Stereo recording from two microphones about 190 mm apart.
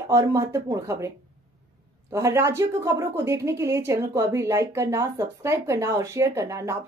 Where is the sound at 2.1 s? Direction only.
15° right (ahead or behind).